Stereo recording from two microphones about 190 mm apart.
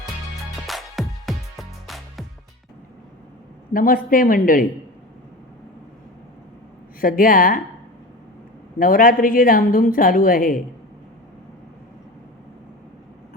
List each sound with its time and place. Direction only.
0.7 s music: centre (ahead or behind)
3.7 s a woman's voice: 50° left (ahead or behind)
7.0 s a woman's voice: 50° left (ahead or behind)
8.8 s a woman's voice: 50° left (ahead or behind)